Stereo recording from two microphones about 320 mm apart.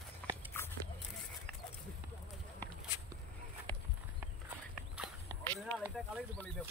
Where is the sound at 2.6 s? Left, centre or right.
Centre.